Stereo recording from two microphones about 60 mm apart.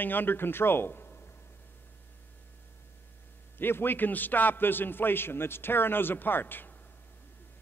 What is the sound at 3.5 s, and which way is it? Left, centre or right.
A man's voice, left.